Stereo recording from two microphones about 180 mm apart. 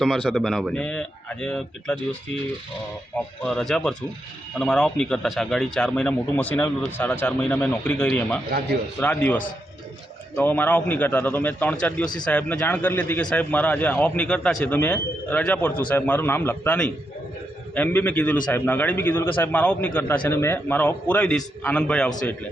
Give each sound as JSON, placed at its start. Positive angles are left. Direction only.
{"t": 0.0, "sound": "speech", "side_deg": 0}
{"t": 3.2, "sound": "speech", "side_deg": 5}
{"t": 8.4, "sound": "speech", "side_deg": -65}
{"t": 9.0, "sound": "a man's voice", "side_deg": 10}